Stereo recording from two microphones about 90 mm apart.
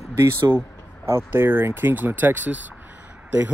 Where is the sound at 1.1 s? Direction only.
25° right (ahead or behind).